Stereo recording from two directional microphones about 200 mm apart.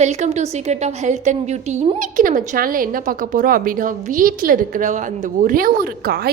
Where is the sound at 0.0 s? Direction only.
35° right (ahead or behind).